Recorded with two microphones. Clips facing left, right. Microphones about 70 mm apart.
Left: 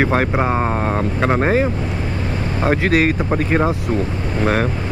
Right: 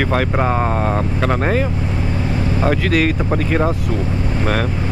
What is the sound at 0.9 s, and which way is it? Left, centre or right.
Speech, left.